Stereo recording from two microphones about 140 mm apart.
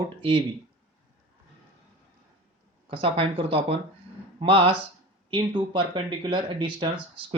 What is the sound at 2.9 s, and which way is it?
Speech, 40° right (ahead or behind).